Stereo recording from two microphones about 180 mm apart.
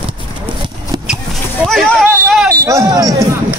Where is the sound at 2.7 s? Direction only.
20° right (ahead or behind).